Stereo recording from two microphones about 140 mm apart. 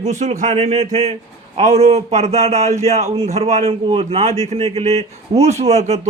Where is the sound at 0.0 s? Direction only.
55° right (ahead or behind).